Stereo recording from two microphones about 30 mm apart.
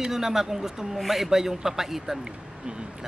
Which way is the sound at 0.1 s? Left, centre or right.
Centre.